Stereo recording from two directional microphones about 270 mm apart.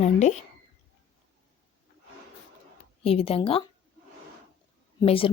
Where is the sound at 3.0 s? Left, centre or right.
Left.